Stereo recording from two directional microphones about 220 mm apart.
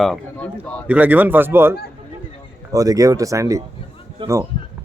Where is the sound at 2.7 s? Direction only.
15° right (ahead or behind).